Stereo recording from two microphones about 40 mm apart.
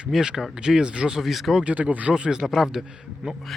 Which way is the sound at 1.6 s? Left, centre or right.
Right.